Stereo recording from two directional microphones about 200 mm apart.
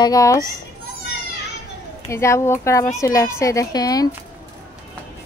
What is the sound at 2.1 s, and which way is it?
A child's voice, 15° left (ahead or behind).